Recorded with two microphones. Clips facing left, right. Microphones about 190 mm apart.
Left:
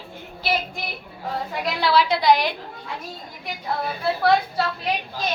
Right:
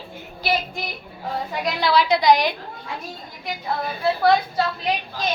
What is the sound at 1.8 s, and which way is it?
Speech, 5° left (ahead or behind).